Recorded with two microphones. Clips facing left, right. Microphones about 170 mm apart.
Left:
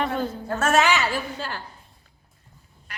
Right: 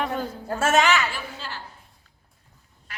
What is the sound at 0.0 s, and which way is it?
Speech, 10° right (ahead or behind).